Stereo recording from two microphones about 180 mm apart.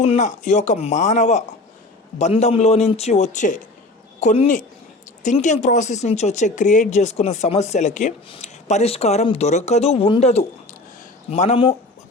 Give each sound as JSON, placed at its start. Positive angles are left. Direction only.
{"t": 0.0, "sound": "speech", "side_deg": 40}